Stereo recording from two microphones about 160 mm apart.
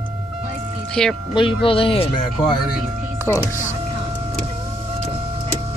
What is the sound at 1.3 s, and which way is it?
Speech, 30° left (ahead or behind).